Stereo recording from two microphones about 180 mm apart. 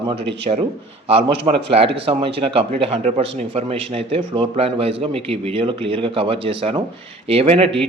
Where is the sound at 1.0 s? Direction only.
35° right (ahead or behind).